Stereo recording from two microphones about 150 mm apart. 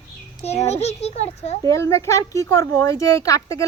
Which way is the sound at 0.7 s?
45° left (ahead or behind).